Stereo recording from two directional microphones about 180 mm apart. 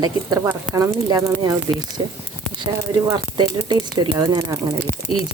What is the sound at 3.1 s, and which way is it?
Speech, 25° right (ahead or behind).